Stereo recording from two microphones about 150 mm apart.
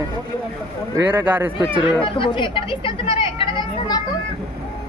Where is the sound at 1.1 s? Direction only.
15° right (ahead or behind).